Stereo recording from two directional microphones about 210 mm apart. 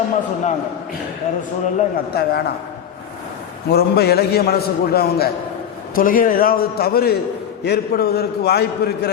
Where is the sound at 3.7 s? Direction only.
50° left (ahead or behind).